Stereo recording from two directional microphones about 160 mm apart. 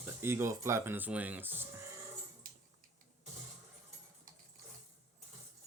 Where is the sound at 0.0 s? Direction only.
15° right (ahead or behind).